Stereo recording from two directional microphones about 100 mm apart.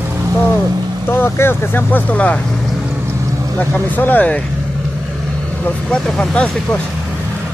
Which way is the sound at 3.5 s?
15° left (ahead or behind).